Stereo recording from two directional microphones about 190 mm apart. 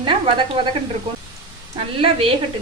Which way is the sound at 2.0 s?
30° right (ahead or behind).